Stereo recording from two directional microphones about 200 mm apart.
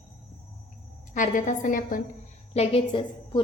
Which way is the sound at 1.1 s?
40° left (ahead or behind).